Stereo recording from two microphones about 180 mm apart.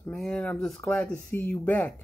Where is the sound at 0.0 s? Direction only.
5° left (ahead or behind).